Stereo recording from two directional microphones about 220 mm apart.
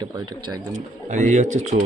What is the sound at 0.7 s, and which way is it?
Speech, 35° right (ahead or behind).